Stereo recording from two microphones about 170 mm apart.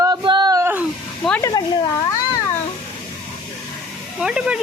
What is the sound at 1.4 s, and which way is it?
Speech, 25° left (ahead or behind).